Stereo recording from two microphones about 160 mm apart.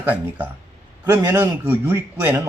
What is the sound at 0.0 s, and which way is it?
Speech, 10° right (ahead or behind).